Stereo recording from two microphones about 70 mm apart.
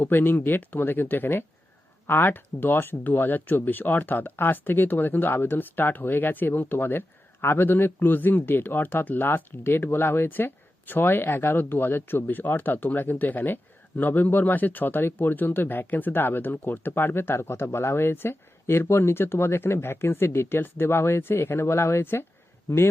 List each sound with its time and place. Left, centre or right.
0.0 s speech: left